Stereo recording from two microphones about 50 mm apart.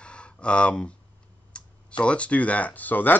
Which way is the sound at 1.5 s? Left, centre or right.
Left.